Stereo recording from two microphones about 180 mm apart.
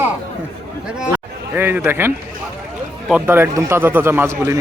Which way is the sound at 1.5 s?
10° right (ahead or behind).